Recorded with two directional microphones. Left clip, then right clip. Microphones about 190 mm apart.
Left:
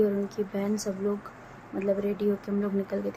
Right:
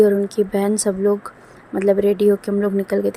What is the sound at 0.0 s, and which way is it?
Speech, 40° right (ahead or behind).